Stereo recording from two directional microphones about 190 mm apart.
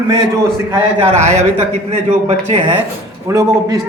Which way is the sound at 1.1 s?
40° right (ahead or behind).